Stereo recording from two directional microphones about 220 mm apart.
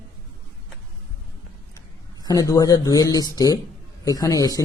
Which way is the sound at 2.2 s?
15° left (ahead or behind).